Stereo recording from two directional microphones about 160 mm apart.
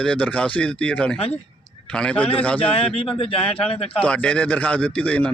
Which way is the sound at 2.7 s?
40° left (ahead or behind).